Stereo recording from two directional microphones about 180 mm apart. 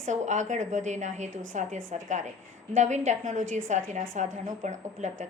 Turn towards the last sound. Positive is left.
turn(degrees=-40)  # may be behind; listen again after turning